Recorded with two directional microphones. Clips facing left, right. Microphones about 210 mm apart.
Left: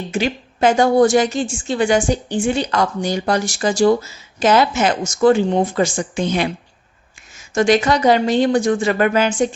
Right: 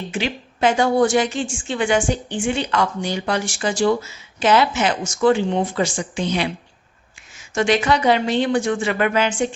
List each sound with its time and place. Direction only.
0.1 s a woman's voice: 45° left (ahead or behind)